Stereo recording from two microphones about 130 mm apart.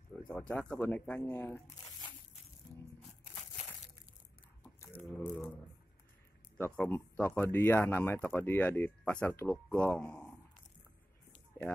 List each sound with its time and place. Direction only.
0.3 s speech: 10° left (ahead or behind)
5.1 s speech: 10° left (ahead or behind)
6.6 s speech: 15° left (ahead or behind)